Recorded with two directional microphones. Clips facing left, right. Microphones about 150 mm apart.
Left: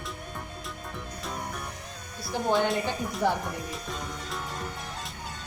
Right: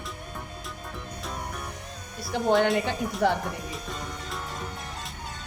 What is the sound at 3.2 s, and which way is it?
Speech, 65° right (ahead or behind).